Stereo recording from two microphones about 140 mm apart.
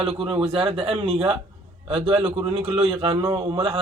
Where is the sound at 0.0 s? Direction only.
40° right (ahead or behind).